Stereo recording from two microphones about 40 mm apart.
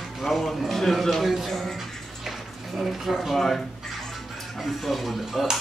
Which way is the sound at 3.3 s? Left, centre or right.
Centre.